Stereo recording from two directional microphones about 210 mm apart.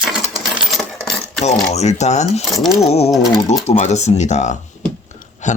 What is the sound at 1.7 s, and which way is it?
Speech, 30° left (ahead or behind).